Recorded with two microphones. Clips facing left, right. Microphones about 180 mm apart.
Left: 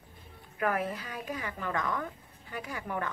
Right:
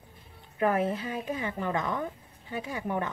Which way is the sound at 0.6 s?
25° right (ahead or behind).